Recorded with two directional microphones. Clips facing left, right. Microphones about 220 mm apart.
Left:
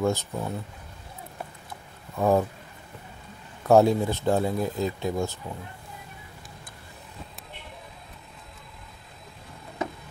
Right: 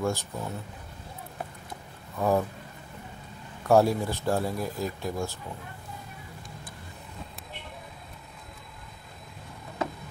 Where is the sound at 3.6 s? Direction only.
20° left (ahead or behind).